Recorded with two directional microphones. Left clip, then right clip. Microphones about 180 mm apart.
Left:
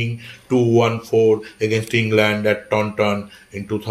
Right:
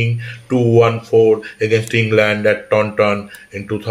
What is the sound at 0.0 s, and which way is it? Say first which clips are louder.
Speech: right 5 dB; 20° left (ahead or behind).